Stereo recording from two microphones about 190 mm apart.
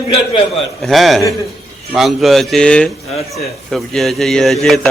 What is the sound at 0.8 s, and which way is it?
A man's voice, centre (ahead or behind).